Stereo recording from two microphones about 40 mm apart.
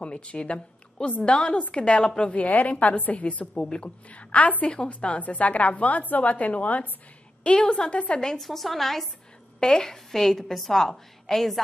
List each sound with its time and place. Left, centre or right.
0.0 s a woman's voice: left
3.5 s a woman's voice: left
4.1 s a woman's voice: left
4.6 s a woman's voice: left
5.2 s a woman's voice: left
7.4 s a woman's voice: left
7.9 s a woman's voice: left
8.4 s a woman's voice: centre